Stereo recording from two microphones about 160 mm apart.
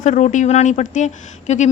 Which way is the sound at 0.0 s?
50° left (ahead or behind).